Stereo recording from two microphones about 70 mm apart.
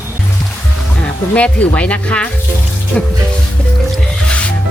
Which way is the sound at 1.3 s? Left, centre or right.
Centre.